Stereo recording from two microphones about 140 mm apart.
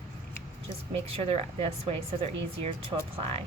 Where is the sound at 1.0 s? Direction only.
45° right (ahead or behind).